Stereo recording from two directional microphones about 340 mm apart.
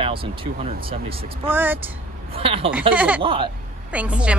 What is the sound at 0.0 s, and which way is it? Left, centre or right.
Speech, centre.